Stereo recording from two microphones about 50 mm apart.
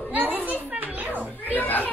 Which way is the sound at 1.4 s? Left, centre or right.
Left.